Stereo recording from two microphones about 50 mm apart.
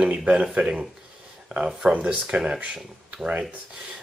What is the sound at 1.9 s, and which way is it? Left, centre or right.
Speech, right.